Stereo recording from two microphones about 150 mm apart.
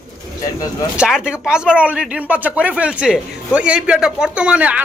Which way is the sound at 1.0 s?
5° right (ahead or behind).